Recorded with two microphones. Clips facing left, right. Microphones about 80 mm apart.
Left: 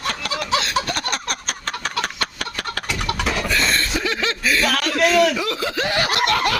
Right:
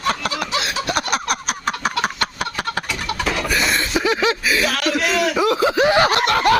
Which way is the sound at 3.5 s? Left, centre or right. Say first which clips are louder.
Right 2 dB; centre.